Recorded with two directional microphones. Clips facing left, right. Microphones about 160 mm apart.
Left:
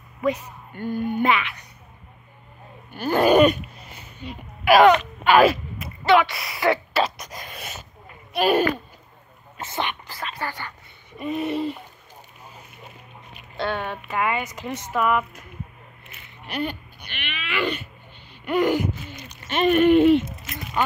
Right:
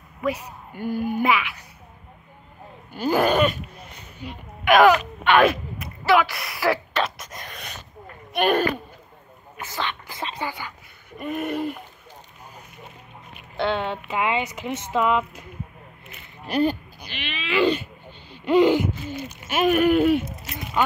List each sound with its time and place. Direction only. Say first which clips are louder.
0.2 s a woman's voice: left 2 dB; 10° right (ahead or behind)
2.9 s a sound: right 2 dB; 15° right (ahead or behind)
3.6 s speech: right 1 dB; centre (ahead or behind)
9.6 s speech: left 2 dB; 20° left (ahead or behind)
10.2 s speech: right 1 dB; 20° right (ahead or behind)
11.1 s a woman's voice: left 1 dB; centre (ahead or behind)
13.6 s speech: right 3 dB; 20° right (ahead or behind)
16.4 s speech: right 7 dB; 40° right (ahead or behind)
19.1 s a woman's voice: right 1 dB; 5° right (ahead or behind)